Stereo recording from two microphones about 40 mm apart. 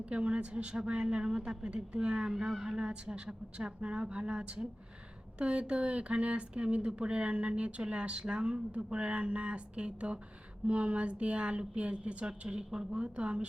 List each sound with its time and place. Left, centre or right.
0.0 s speech: right
2.3 s speech: centre
13.0 s speech: right